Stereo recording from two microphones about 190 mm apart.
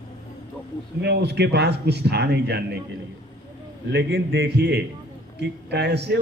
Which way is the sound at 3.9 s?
60° right (ahead or behind).